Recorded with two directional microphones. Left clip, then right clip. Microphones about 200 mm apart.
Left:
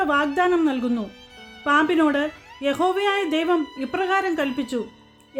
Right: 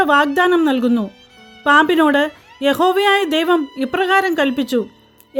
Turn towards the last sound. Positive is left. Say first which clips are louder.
# right 8 dB
turn(degrees=-45)  # may be behind; listen again after turning